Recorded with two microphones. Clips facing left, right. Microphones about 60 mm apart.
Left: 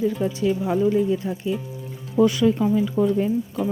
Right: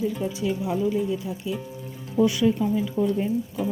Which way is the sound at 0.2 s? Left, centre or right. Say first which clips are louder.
Left 4 dB; left.